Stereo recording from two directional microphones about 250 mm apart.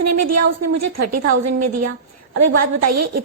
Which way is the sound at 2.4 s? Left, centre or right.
Right.